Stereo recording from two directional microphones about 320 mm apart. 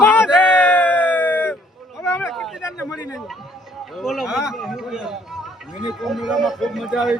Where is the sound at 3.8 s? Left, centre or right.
Centre.